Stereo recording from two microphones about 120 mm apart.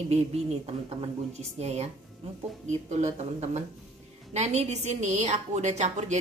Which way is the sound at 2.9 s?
75° right (ahead or behind).